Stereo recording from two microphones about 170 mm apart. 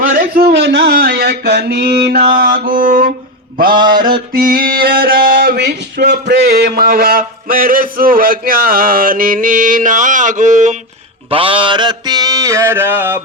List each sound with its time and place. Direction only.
0.2 s speech: 65° right (ahead or behind)
2.3 s music: 60° right (ahead or behind)
4.3 s a sound: 60° right (ahead or behind); by 10.8 s 45° right (ahead or behind)
11.3 s mantra: 30° right (ahead or behind); by 13.1 s 15° right (ahead or behind)